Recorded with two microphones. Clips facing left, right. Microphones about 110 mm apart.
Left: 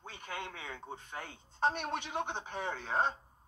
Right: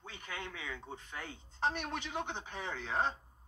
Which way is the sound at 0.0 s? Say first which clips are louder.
Left 2 dB; 45° left (ahead or behind).